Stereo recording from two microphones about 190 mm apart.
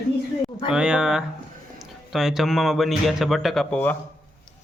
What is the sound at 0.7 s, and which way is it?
Speech, 5° right (ahead or behind).